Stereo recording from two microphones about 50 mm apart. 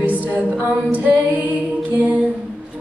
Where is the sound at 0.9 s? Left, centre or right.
Right.